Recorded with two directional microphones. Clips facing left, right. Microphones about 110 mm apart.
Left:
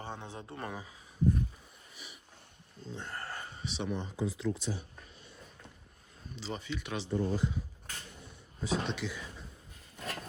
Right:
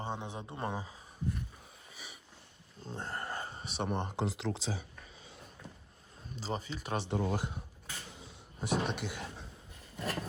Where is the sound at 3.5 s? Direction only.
45° right (ahead or behind); by 4.7 s 90° right.